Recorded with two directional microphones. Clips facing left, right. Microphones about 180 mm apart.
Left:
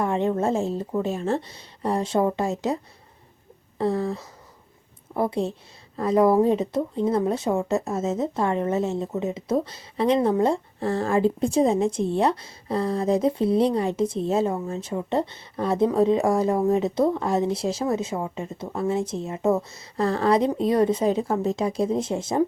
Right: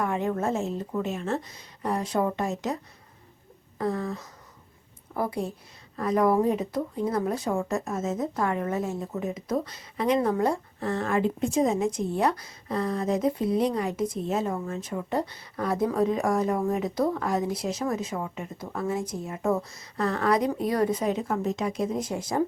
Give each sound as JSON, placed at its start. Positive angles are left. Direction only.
{"t": 0.0, "sound": "speech", "side_deg": 30}
{"t": 3.8, "sound": "speech", "side_deg": 30}